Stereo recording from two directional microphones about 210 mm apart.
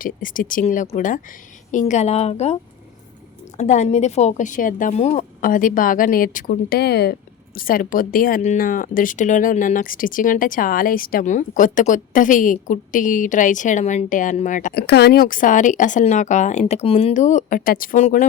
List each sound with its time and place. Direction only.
0.0 s speech: 40° left (ahead or behind)
3.6 s speech: 35° left (ahead or behind)